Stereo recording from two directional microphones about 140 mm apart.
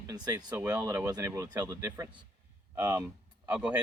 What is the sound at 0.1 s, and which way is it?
Speech, 25° right (ahead or behind).